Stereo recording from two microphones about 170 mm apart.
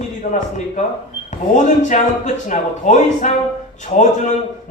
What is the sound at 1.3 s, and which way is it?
Speech, 45° left (ahead or behind).